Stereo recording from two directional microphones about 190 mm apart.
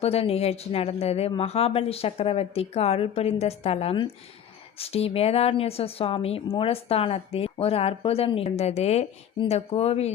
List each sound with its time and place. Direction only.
0.0 s a woman's voice: 30° left (ahead or behind)